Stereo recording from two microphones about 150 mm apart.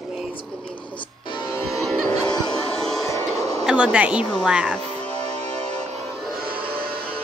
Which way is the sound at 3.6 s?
5° right (ahead or behind).